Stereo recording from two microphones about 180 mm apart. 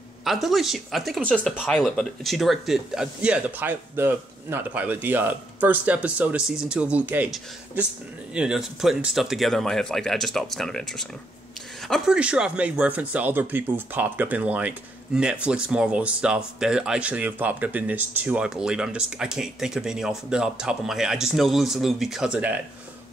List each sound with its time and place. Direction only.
0.2 s speech: centre (ahead or behind)
8.4 s speech: 5° right (ahead or behind)